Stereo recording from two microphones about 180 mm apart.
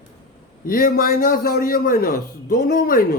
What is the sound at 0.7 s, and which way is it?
A man's voice, 55° left (ahead or behind).